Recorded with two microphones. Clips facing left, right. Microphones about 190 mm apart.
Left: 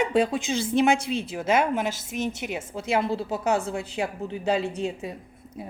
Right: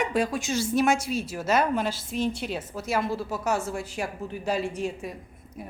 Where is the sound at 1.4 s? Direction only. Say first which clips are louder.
Left 1 dB; 20° left (ahead or behind).